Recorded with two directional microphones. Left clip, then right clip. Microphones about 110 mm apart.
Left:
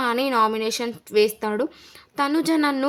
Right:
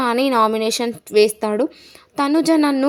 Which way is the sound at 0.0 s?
35° right (ahead or behind).